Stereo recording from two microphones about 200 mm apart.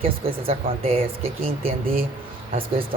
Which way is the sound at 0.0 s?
30° right (ahead or behind).